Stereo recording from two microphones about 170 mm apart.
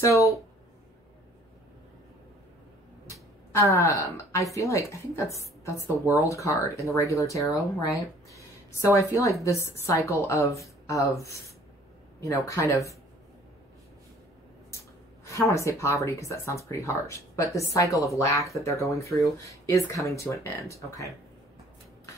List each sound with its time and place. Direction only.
0.0 s speech: 20° left (ahead or behind)
3.1 s speech: 15° left (ahead or behind)
15.2 s speech: 15° left (ahead or behind)